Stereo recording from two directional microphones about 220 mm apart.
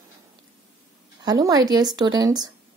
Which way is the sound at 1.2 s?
15° right (ahead or behind).